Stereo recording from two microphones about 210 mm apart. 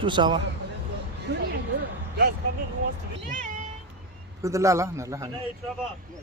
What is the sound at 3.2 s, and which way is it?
Speech, 40° right (ahead or behind).